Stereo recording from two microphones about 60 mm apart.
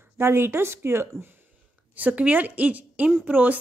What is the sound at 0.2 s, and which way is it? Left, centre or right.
Speech, right.